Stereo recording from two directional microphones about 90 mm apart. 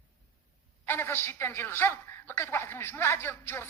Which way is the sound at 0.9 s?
25° left (ahead or behind).